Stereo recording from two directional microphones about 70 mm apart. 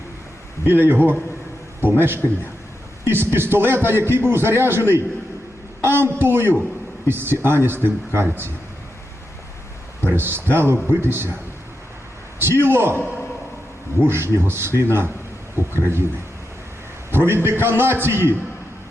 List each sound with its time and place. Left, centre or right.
0.6 s a man's voice: right
10.0 s a man's voice: right
12.4 s a man's voice: right
14.0 s a man's voice: right
17.1 s a man's voice: right